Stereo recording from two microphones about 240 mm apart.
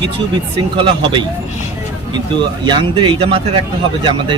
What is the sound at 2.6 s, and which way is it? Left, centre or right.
Speech, centre.